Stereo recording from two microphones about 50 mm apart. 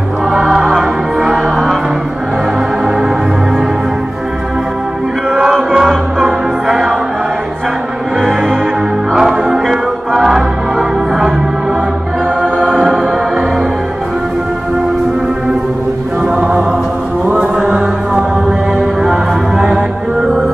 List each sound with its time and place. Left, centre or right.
0.3 s music: centre
1.3 s music: centre
5.3 s music: centre
8.2 s music: centre
9.1 s music: centre
12.4 s music: centre
16.3 s music: centre